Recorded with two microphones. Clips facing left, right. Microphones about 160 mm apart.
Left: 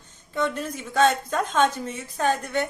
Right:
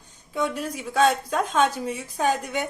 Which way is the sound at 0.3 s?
10° right (ahead or behind).